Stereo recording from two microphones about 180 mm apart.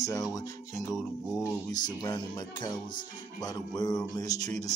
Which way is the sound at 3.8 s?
20° left (ahead or behind).